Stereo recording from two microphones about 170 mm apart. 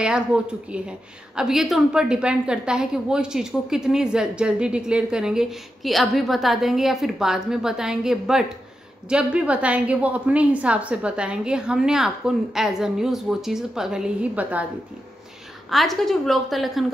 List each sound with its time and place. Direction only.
0.0 s a woman's voice: 5° right (ahead or behind)
15.7 s a woman's voice: centre (ahead or behind)